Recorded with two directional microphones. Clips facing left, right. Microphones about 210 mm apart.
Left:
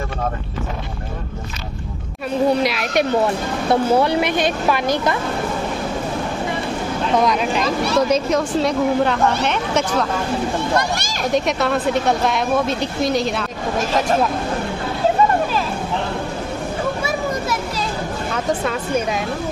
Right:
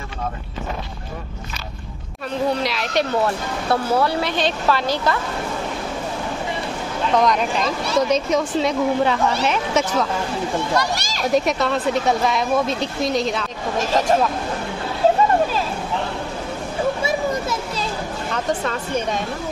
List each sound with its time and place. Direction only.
2.6 s speech: 10° left (ahead or behind)
7.2 s speech: 5° left (ahead or behind)
10.8 s speech: 50° left (ahead or behind)
11.3 s speech: centre (ahead or behind)
17.0 s children playing: 25° right (ahead or behind)
18.3 s speech: 5° left (ahead or behind)